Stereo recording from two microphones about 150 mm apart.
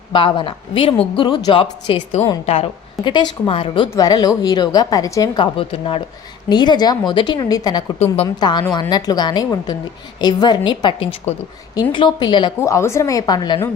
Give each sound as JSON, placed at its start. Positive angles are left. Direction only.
{"t": 0.1, "sound": "a woman's voice", "side_deg": 30}
{"t": 3.8, "sound": "a woman's voice", "side_deg": 25}
{"t": 5.4, "sound": "a woman's voice", "side_deg": 35}